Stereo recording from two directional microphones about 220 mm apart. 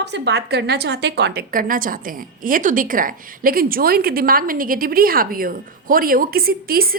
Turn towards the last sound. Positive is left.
turn(degrees=-40)  # may be behind; listen again after turning